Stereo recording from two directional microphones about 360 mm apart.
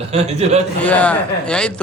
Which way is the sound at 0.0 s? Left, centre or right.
Centre.